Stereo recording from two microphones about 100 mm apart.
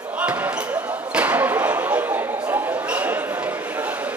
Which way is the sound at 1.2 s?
15° right (ahead or behind).